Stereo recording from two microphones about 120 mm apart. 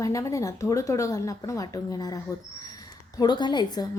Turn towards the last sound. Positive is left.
turn(degrees=35)  # may be behind; listen again after turning